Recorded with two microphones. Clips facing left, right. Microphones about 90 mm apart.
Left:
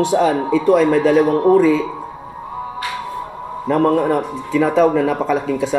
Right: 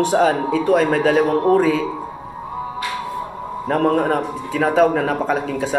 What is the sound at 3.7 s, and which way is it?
A man's voice, 70° right (ahead or behind).